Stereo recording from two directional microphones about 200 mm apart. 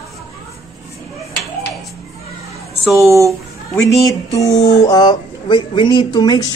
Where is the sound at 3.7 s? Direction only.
15° left (ahead or behind).